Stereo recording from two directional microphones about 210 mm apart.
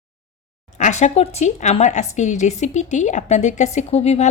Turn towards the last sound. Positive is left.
turn(degrees=30)  # may be behind; listen again after turning